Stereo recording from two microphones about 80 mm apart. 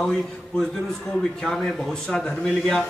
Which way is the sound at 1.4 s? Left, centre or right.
Centre.